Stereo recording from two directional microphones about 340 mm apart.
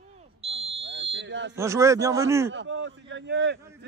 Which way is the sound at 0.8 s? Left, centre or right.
Right.